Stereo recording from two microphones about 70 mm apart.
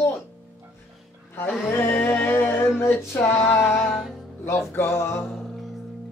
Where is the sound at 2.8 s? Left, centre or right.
Left.